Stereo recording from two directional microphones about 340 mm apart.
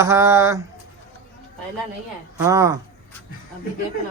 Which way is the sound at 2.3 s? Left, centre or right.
Centre.